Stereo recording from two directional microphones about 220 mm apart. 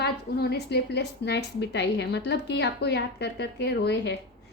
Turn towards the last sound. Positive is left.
turn(degrees=50)  # may be behind; listen again after turning